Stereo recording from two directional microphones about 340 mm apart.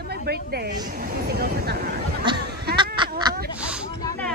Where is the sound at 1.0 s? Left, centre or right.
Right.